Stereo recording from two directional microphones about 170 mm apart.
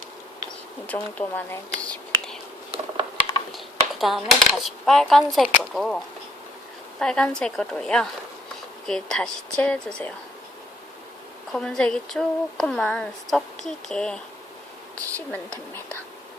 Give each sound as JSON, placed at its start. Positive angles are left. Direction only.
{"t": 0.9, "sound": "speech", "side_deg": 10}
{"t": 2.7, "sound": "typing", "side_deg": -35}
{"t": 3.5, "sound": "speech", "side_deg": 0}
{"t": 7.0, "sound": "a woman's voice", "side_deg": 5}
{"t": 11.5, "sound": "a woman's voice", "side_deg": 5}
{"t": 15.3, "sound": "a woman's voice", "side_deg": 10}